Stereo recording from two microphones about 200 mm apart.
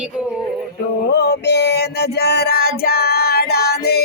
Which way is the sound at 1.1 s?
55° left (ahead or behind).